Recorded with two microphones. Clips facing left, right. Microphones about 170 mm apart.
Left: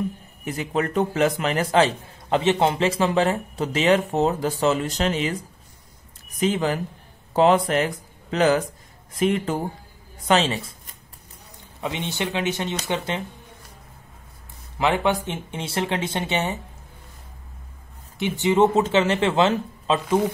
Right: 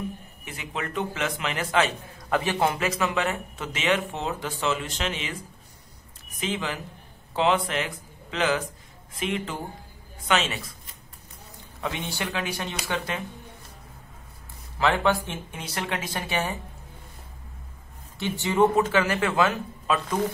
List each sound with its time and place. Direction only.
0.5 s a man's voice: 40° left (ahead or behind)
6.4 s a man's voice: 40° left (ahead or behind)
11.8 s speech: 20° left (ahead or behind)
14.8 s speech: 20° left (ahead or behind)
18.2 s speech: 20° left (ahead or behind)